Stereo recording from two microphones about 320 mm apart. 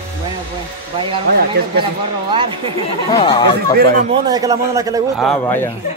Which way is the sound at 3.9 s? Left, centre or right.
Centre.